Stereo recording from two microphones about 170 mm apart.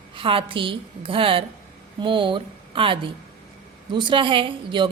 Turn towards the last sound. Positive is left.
turn(degrees=-30)  # may be behind; listen again after turning